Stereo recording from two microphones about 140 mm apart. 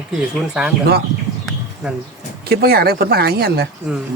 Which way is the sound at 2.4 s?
90° right.